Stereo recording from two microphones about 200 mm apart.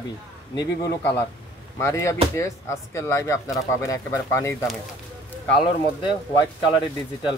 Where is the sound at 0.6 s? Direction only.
15° left (ahead or behind).